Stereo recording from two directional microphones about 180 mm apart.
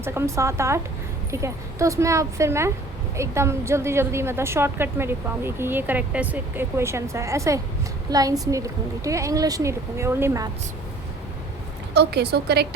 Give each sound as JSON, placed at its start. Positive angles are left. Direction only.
{"t": 0.0, "sound": "a woman's voice", "side_deg": -15}
{"t": 11.9, "sound": "a woman's voice", "side_deg": -65}